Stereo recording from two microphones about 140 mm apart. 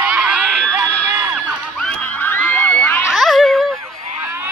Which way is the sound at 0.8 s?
20° right (ahead or behind).